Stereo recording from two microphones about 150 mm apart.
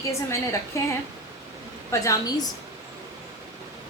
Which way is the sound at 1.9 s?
20° left (ahead or behind).